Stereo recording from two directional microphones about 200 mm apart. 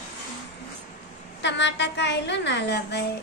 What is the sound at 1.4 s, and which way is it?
A woman's voice, 60° left (ahead or behind).